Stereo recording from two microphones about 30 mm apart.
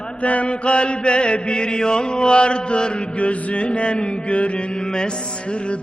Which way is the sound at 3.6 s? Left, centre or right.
Left.